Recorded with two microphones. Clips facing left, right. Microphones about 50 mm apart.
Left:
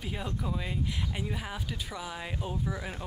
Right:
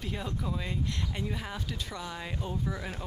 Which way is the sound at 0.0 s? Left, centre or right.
Centre.